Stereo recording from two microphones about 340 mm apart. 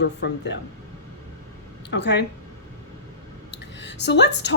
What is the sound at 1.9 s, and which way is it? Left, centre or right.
Speech, left.